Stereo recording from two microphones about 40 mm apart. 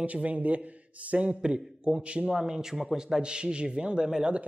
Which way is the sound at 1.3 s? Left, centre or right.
Right.